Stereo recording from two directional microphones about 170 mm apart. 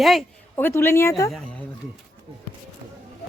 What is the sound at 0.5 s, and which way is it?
Speech, 15° left (ahead or behind).